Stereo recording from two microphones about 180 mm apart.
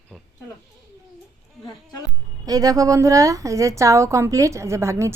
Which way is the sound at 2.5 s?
20° right (ahead or behind).